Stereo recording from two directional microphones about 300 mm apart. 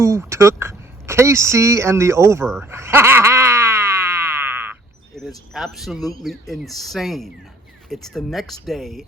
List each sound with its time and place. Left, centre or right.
0.0 s speech: centre
2.6 s a sound: centre
5.5 s speech: centre